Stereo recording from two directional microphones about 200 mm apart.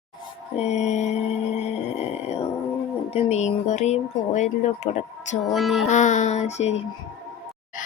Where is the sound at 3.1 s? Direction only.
35° left (ahead or behind).